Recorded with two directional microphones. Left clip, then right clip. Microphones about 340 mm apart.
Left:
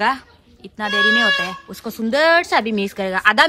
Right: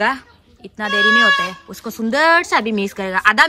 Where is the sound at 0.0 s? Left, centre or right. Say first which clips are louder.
Right 1 dB; centre.